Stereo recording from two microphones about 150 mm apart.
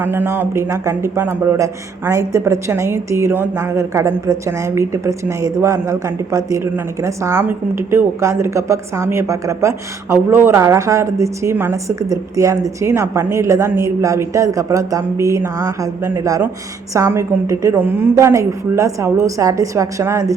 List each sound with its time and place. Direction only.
0.0 s a man's voice: 15° right (ahead or behind)